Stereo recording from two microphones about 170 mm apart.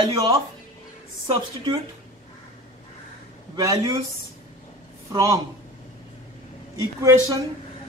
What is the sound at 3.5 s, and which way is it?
Speech, 25° right (ahead or behind).